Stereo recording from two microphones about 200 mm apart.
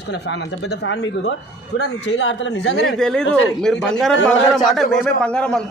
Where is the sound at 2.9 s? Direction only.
Centre (ahead or behind).